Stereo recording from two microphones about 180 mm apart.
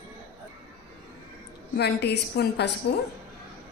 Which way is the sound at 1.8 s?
65° left (ahead or behind).